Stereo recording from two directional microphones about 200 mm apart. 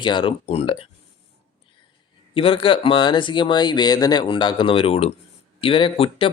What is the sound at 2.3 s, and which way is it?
Speech, 30° left (ahead or behind).